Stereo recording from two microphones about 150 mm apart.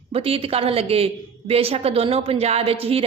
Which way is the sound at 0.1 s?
40° right (ahead or behind).